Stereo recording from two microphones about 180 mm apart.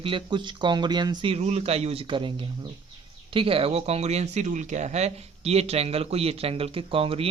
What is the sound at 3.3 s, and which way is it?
Speech, 30° right (ahead or behind).